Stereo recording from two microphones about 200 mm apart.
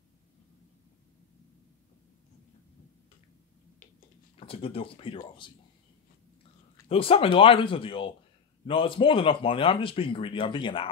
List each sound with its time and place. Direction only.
4.4 s speech: 30° left (ahead or behind)
6.9 s speech: 30° left (ahead or behind)